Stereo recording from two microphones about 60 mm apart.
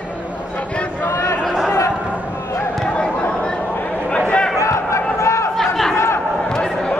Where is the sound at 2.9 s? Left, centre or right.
Centre.